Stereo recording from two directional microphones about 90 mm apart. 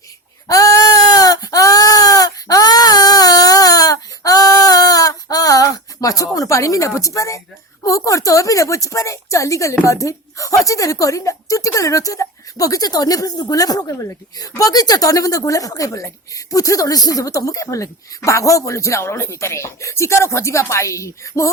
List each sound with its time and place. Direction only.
0.4 s sheep: 40° left (ahead or behind)
7.9 s a woman's voice: 35° left (ahead or behind)